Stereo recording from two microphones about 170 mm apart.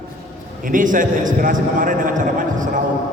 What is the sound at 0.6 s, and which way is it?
A man's voice, 50° right (ahead or behind).